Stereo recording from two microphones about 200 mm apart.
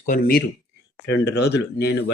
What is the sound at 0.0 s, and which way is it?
Speech, 45° left (ahead or behind).